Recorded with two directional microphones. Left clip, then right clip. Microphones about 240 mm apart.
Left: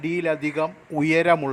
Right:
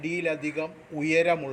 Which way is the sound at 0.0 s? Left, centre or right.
Left.